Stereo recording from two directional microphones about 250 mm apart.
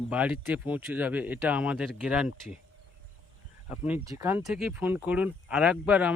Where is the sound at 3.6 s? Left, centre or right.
Centre.